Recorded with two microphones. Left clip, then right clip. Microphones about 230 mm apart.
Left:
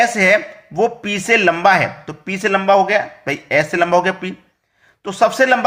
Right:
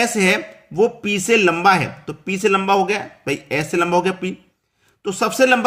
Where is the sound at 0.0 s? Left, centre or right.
Centre.